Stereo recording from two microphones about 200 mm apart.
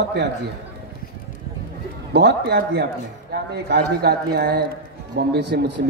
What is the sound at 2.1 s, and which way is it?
A man's voice, 55° right (ahead or behind).